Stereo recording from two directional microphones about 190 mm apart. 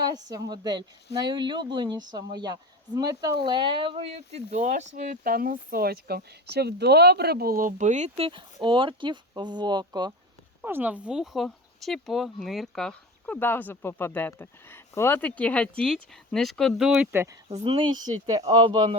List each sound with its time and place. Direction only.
0.0 s speech: 20° right (ahead or behind)
10.6 s speech: 10° right (ahead or behind)
17.5 s speech: 25° right (ahead or behind)